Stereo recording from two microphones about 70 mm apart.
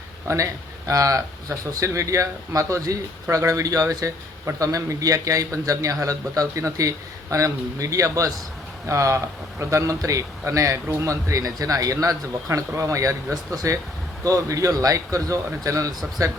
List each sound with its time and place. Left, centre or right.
0.3 s speech: right